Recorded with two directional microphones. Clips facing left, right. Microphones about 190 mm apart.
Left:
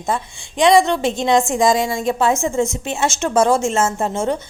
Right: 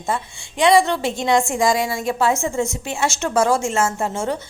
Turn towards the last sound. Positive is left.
turn(degrees=20)  # may be behind; listen again after turning